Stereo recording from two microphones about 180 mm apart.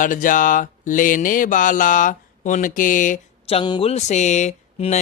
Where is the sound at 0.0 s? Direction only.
45° left (ahead or behind).